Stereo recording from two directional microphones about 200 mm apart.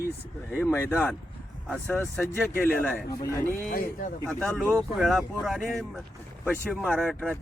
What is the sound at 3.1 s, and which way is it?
Speech, 20° left (ahead or behind).